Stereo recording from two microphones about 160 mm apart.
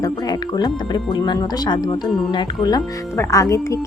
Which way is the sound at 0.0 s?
25° left (ahead or behind).